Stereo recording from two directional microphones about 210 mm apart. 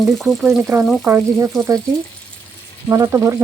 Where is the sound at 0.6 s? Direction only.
10° right (ahead or behind).